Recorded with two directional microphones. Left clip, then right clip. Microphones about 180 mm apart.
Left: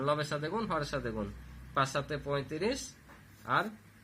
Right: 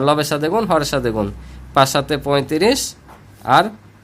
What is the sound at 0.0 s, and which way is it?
Speech, 60° right (ahead or behind).